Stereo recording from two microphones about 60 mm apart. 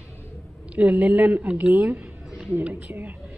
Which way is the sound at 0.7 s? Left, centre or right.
Right.